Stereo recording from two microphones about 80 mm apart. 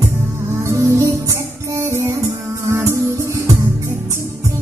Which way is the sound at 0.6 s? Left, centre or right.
Right.